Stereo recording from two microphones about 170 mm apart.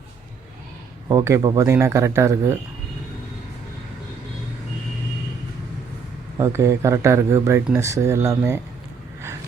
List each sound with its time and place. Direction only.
1.0 s speech: 20° right (ahead or behind)
6.4 s speech: 15° right (ahead or behind)